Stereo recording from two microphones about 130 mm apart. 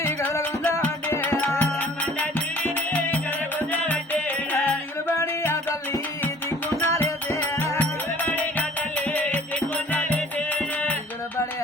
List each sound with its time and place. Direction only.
0.9 s music: 15° left (ahead or behind)